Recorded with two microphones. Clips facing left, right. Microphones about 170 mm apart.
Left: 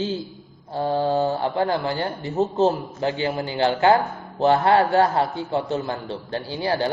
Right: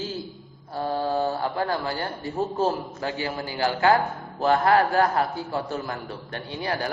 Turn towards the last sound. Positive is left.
turn(degrees=30)  # may be behind; listen again after turning